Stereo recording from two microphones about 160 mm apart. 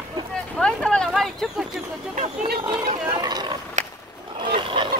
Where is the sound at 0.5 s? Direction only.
5° left (ahead or behind).